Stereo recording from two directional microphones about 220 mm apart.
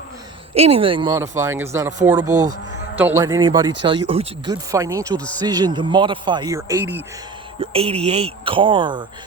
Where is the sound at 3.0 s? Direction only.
10° right (ahead or behind).